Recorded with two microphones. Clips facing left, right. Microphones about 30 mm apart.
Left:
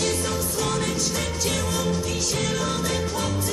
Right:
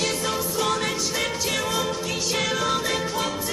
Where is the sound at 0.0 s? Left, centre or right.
Centre.